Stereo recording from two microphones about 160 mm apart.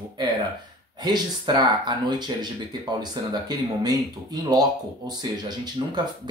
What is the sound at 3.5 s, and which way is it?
Speech, 25° right (ahead or behind).